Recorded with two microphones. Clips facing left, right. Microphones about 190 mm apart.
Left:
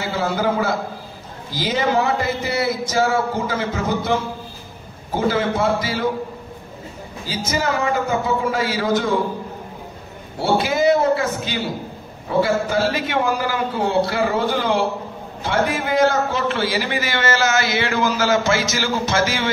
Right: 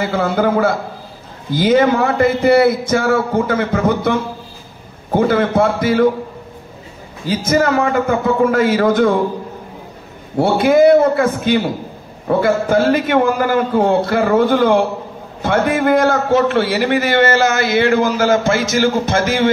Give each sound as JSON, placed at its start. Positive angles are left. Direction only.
{"t": 0.0, "sound": "a man's voice", "side_deg": -55}
{"t": 7.2, "sound": "a man's voice", "side_deg": -55}
{"t": 10.3, "sound": "a man's voice", "side_deg": -55}